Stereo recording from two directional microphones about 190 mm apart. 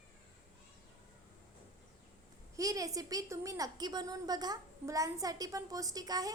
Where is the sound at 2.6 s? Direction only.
20° right (ahead or behind).